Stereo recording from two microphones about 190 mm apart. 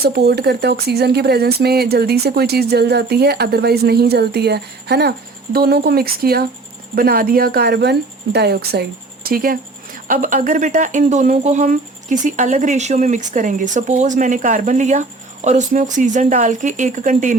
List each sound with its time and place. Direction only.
0.0 s speech: 60° right (ahead or behind); by 17.3 s 40° right (ahead or behind)